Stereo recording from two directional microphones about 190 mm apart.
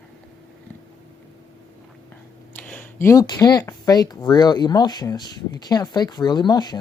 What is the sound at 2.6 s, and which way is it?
Speech, 5° left (ahead or behind).